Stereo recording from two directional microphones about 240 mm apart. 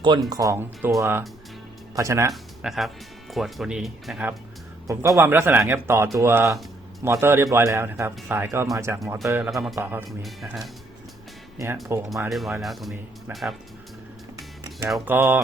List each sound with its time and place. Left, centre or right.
0.0 s speech: centre
2.3 s speech: centre
9.0 s speech: centre
12.0 s speech: centre
14.8 s speech: centre